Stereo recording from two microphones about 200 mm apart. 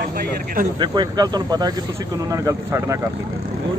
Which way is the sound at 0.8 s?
20° right (ahead or behind).